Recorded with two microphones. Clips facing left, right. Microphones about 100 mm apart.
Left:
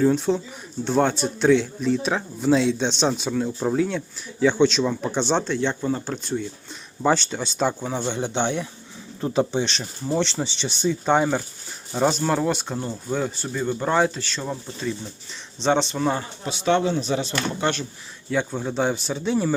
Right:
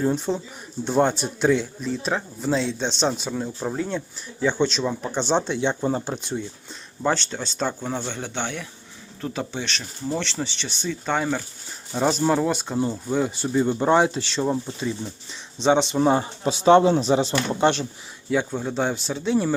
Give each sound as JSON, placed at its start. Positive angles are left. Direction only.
{"t": 0.2, "sound": "speech", "side_deg": 0}
{"t": 2.0, "sound": "speech", "side_deg": 5}
{"t": 5.5, "sound": "speech", "side_deg": -15}
{"t": 7.0, "sound": "speech", "side_deg": 5}
{"t": 12.3, "sound": "speech", "side_deg": -5}
{"t": 13.4, "sound": "speech", "side_deg": -20}
{"t": 16.0, "sound": "speech", "side_deg": -25}
{"t": 18.3, "sound": "speech", "side_deg": -5}